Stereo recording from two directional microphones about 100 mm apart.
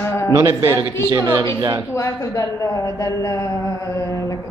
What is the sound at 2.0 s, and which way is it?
A woman's voice, 30° left (ahead or behind).